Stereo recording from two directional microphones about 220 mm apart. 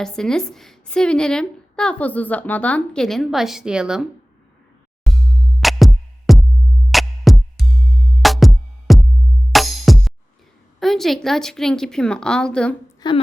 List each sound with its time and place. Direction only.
0.0 s a woman's voice: 5° left (ahead or behind)
5.1 s music: centre (ahead or behind)
8.2 s music: centre (ahead or behind)
10.8 s a woman's voice: centre (ahead or behind)
13.0 s a woman's voice: 20° left (ahead or behind)